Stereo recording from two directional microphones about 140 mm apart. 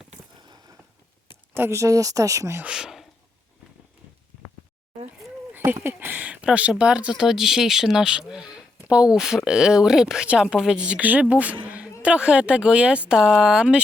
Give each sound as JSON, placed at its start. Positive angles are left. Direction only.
{"t": 0.4, "sound": "a sound", "side_deg": -30}
{"t": 1.5, "sound": "speech", "side_deg": -20}
{"t": 2.6, "sound": "speech", "side_deg": -5}
{"t": 5.5, "sound": "speech", "side_deg": -15}